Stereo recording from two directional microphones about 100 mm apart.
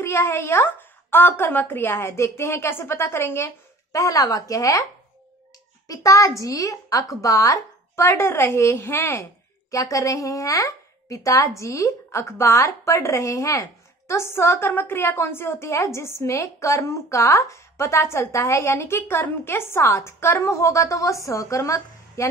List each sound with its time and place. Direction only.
0.0 s a child's voice: 25° left (ahead or behind)
5.9 s a child's voice: 35° left (ahead or behind)